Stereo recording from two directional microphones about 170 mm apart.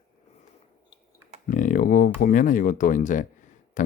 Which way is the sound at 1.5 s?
50° left (ahead or behind).